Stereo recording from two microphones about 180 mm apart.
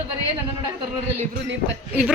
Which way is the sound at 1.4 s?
90° right.